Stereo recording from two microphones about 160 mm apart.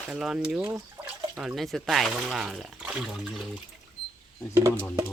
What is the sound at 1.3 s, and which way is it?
Speech, centre (ahead or behind).